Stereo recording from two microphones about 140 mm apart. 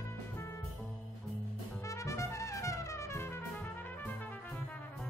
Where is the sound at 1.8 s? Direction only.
20° left (ahead or behind).